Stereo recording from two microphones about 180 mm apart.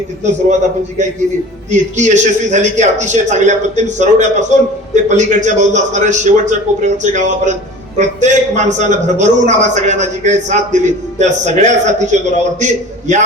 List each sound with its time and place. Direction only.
1.7 s a man's voice: 40° right (ahead or behind)